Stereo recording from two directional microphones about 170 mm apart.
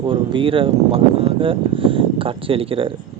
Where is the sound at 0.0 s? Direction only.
30° right (ahead or behind).